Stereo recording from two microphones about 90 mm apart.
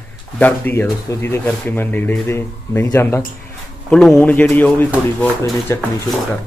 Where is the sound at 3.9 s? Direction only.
5° left (ahead or behind).